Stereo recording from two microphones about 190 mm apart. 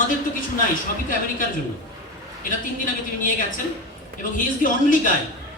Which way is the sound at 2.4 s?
45° left (ahead or behind).